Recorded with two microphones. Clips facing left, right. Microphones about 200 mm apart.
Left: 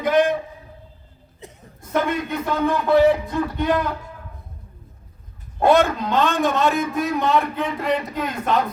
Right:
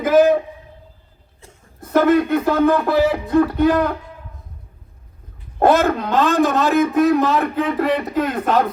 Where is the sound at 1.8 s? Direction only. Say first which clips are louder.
Right 8 dB; 60° right (ahead or behind).